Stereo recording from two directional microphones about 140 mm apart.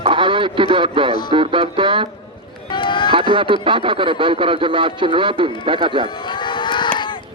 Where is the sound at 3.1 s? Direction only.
40° right (ahead or behind).